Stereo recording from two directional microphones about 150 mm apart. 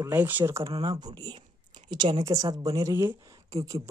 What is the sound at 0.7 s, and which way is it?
A woman's voice, 30° right (ahead or behind).